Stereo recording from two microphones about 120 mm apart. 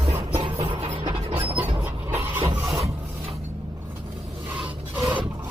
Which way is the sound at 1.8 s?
15° right (ahead or behind).